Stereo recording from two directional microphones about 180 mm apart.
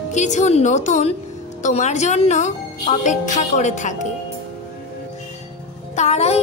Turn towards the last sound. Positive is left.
turn(degrees=35)  # may be behind; listen again after turning